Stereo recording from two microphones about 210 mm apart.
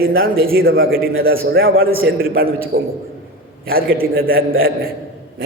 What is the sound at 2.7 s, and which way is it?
A man's voice, 45° right (ahead or behind).